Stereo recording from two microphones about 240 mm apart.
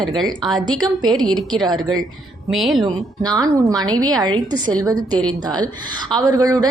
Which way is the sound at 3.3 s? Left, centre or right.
Centre.